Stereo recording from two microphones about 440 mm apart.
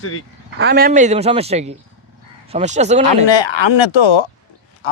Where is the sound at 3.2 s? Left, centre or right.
Left.